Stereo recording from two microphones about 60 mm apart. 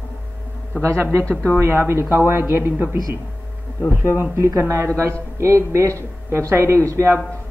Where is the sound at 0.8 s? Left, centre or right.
Right.